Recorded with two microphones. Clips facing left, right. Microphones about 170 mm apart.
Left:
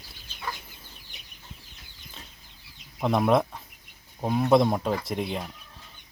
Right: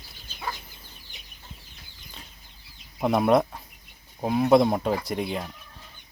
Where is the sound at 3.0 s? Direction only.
5° right (ahead or behind).